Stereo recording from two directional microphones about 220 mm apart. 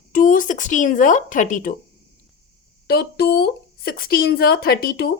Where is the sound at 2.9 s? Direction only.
45° left (ahead or behind).